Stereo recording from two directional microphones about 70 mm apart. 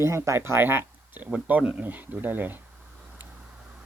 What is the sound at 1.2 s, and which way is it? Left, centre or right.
Speech, centre.